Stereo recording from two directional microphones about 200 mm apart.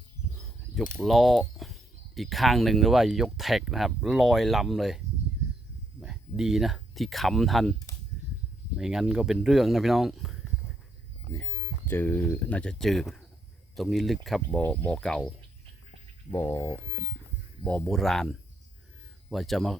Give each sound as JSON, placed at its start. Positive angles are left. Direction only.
{"t": 0.9, "sound": "speech", "side_deg": 0}
{"t": 8.8, "sound": "speech", "side_deg": 0}
{"t": 11.9, "sound": "speech", "side_deg": 10}
{"t": 16.3, "sound": "speech", "side_deg": 10}